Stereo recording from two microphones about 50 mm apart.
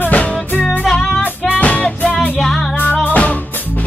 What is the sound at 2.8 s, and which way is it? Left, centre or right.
Music, left.